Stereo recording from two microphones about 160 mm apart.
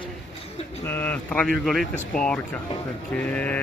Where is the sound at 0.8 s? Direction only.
10° left (ahead or behind).